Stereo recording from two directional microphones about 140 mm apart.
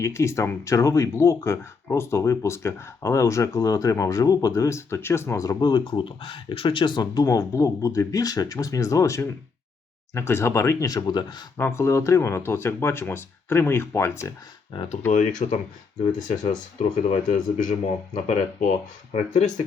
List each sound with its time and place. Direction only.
0.0 s speech: 20° left (ahead or behind)
11.5 s speech: 20° left (ahead or behind)
15.1 s speech: 60° left (ahead or behind)